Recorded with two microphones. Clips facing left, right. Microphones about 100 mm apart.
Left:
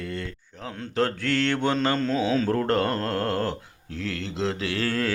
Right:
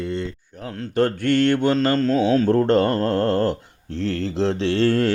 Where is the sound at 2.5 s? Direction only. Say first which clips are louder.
Right 6 dB; 25° right (ahead or behind).